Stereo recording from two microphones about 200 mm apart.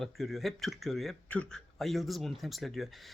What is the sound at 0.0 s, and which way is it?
Speech, centre (ahead or behind).